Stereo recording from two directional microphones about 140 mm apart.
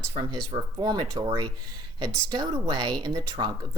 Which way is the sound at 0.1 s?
30° right (ahead or behind).